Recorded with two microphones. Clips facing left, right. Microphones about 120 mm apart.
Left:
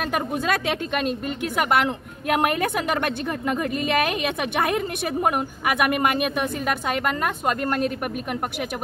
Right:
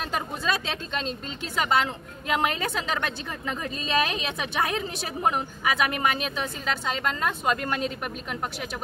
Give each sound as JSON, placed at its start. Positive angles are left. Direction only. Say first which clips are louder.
{"t": 0.0, "sound": "a woman's voice", "louder": "left 5 dB", "side_deg": 60}